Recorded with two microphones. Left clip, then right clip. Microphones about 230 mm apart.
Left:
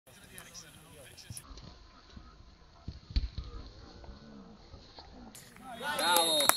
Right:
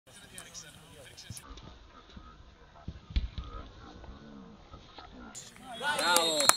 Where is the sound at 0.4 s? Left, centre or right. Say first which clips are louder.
Right 2 dB; right.